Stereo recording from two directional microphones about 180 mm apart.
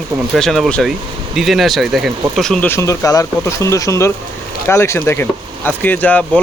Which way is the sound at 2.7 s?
15° left (ahead or behind).